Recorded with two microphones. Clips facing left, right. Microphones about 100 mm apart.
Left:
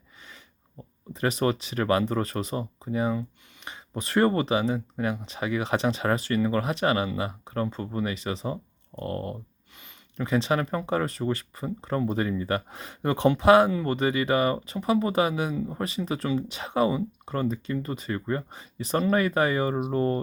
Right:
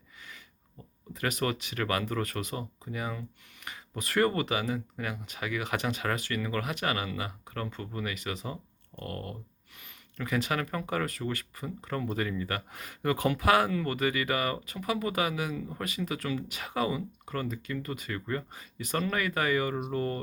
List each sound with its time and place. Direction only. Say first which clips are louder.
1.1 s speech: left 6 dB; 30° left (ahead or behind)